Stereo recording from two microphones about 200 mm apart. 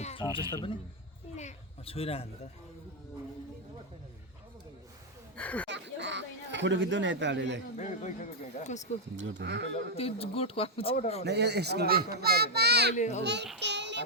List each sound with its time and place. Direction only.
0.0 s a sound: 30° left (ahead or behind)
0.5 s speech: 25° left (ahead or behind)
1.4 s a sound: 30° left (ahead or behind)
5.4 s speech: 5° left (ahead or behind)
5.6 s speech: 60° right (ahead or behind)
7.8 s speech: 35° left (ahead or behind)
9.1 s a child's voice: 65° right (ahead or behind)
9.9 s speech: 30° left (ahead or behind)
11.2 s a child's voice: 55° right (ahead or behind)
12.9 s speech: 35° left (ahead or behind)
13.2 s a child's voice: 60° right (ahead or behind)
13.6 s child singing: 60° right (ahead or behind)